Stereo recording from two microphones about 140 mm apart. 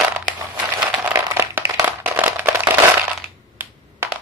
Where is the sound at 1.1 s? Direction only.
20° right (ahead or behind).